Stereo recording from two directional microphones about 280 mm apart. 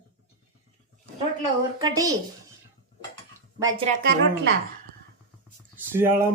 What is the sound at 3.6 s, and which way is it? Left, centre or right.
Speech, centre.